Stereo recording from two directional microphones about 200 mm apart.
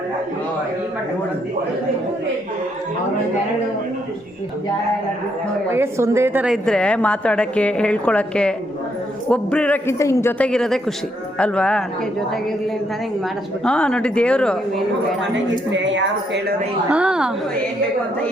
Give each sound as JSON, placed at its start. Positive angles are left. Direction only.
{"t": 5.7, "sound": "a woman's voice", "side_deg": -10}
{"t": 13.7, "sound": "a woman's voice", "side_deg": 5}
{"t": 15.7, "sound": "a woman's voice", "side_deg": -65}
{"t": 16.9, "sound": "a woman's voice", "side_deg": -5}